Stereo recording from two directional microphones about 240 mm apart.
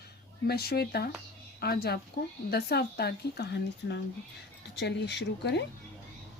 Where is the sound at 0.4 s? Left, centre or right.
Left.